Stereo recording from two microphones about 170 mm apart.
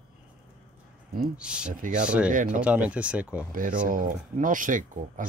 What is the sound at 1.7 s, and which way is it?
Speech, 50° right (ahead or behind).